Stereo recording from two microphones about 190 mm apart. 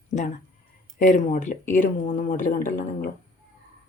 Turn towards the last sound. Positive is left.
turn(degrees=50)  # may be behind; listen again after turning